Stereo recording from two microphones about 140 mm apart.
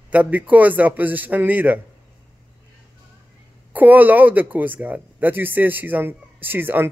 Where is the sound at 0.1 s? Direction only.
10° right (ahead or behind).